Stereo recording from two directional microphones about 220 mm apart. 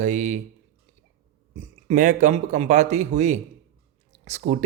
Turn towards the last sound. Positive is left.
turn(degrees=-30)  # may be behind; listen again after turning